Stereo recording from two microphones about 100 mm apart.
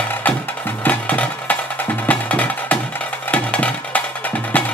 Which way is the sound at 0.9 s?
15° left (ahead or behind).